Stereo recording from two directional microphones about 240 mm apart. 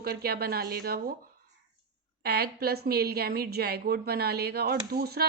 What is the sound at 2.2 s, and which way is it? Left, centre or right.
A woman's voice, right.